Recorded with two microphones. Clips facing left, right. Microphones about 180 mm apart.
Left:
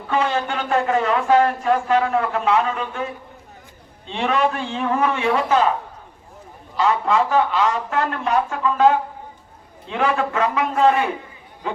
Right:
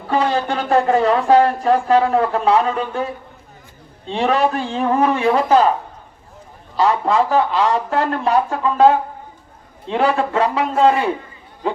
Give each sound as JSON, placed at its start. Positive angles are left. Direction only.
{"t": 0.1, "sound": "speech", "side_deg": -35}
{"t": 6.7, "sound": "speech", "side_deg": -35}